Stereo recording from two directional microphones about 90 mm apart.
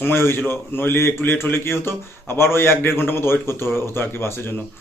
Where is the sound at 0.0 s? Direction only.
25° left (ahead or behind).